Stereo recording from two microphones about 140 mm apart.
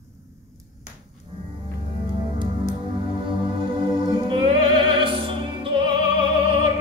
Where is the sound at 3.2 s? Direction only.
35° right (ahead or behind).